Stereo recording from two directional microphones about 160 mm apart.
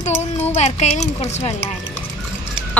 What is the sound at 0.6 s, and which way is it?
Speech, 45° left (ahead or behind).